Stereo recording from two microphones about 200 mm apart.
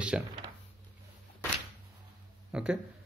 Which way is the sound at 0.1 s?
5° right (ahead or behind).